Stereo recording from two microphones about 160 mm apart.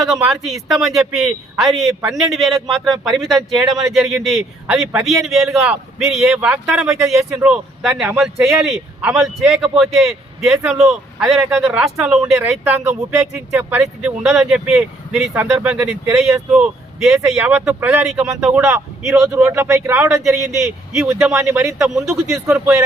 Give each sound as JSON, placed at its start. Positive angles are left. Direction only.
{"t": 0.0, "sound": "speech", "side_deg": 0}
{"t": 1.9, "sound": "a man's voice", "side_deg": -20}
{"t": 2.1, "sound": "speech", "side_deg": 0}
{"t": 15.3, "sound": "speech", "side_deg": -15}
{"t": 19.1, "sound": "speech", "side_deg": -15}
{"t": 20.7, "sound": "speech", "side_deg": 0}
{"t": 21.4, "sound": "speech", "side_deg": -15}
{"t": 21.7, "sound": "speech", "side_deg": 0}